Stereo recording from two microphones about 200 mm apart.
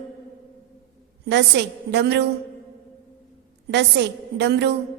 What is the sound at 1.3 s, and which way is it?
Speech, 60° right (ahead or behind).